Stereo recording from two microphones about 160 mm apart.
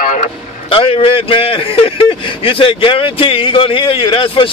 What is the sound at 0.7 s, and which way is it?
A man's voice, 35° left (ahead or behind).